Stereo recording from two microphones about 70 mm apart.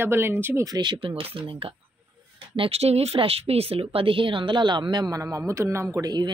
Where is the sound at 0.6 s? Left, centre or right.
Right.